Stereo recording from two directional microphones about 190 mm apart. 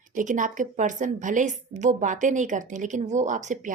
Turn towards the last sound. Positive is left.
turn(degrees=-40)  # may be behind; listen again after turning